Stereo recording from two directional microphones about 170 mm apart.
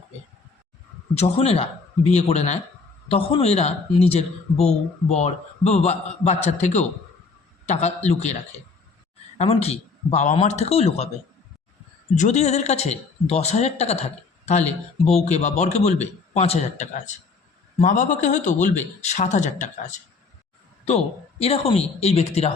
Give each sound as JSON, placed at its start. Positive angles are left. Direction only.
{"t": 1.1, "sound": "speech", "side_deg": 35}
{"t": 12.1, "sound": "a man's voice", "side_deg": 45}